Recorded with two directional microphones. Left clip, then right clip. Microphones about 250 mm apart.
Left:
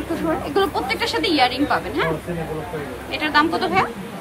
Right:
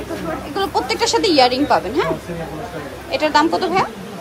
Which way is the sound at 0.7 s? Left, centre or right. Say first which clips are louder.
Right 4 dB; centre.